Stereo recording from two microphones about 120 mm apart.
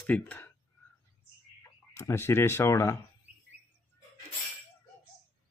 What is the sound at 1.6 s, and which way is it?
Speech, 25° left (ahead or behind).